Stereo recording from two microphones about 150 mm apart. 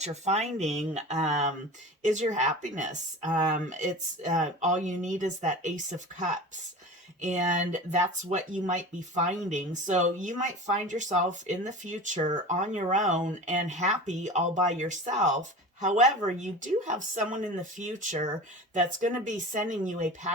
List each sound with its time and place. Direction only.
0.0 s speech: 45° right (ahead or behind)